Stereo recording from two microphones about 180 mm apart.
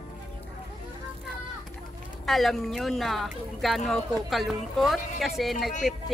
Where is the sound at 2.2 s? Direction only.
Centre (ahead or behind).